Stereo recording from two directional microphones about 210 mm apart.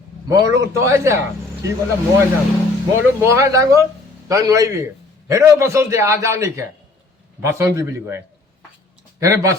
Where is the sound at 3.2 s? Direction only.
15° right (ahead or behind).